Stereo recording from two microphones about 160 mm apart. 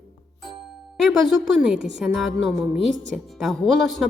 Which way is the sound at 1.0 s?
5° right (ahead or behind).